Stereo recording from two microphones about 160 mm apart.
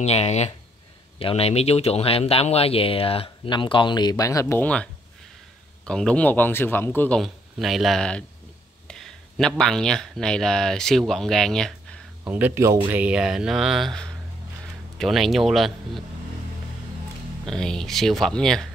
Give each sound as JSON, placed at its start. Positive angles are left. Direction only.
{"t": 0.0, "sound": "speech", "side_deg": 40}
{"t": 5.9, "sound": "a man's voice", "side_deg": 5}
{"t": 7.2, "sound": "speech", "side_deg": 0}
{"t": 12.3, "sound": "speech", "side_deg": -10}
{"t": 17.5, "sound": "speech", "side_deg": 5}